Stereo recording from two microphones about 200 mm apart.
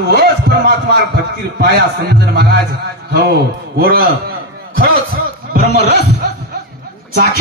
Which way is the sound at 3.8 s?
45° right (ahead or behind).